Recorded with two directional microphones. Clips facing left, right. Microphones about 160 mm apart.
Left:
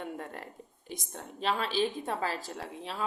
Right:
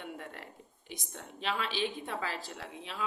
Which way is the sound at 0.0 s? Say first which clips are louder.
Left 4 dB; 40° left (ahead or behind).